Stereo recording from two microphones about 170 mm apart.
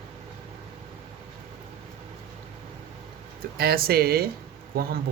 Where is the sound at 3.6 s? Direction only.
65° right (ahead or behind).